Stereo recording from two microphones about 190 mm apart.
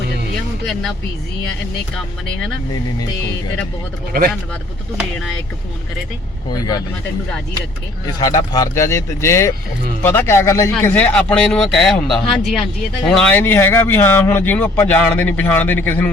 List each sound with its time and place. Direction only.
0.6 s speech: centre (ahead or behind)
4.9 s speech: centre (ahead or behind)
6.5 s speech: 20° left (ahead or behind)
8.2 s speech: 20° left (ahead or behind)